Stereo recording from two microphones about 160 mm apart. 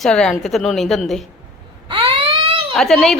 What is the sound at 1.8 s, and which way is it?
Baby cry, 35° right (ahead or behind).